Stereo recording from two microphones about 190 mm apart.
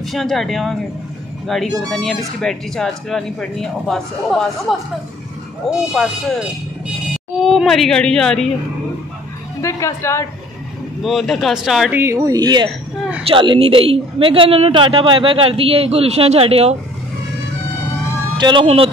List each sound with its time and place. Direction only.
0.0 s speech: centre (ahead or behind)
7.3 s speech: centre (ahead or behind)
9.6 s a woman's voice: 15° left (ahead or behind)
11.0 s speech: centre (ahead or behind)
12.0 s a woman's voice: 15° right (ahead or behind)
18.4 s a woman's voice: 25° right (ahead or behind)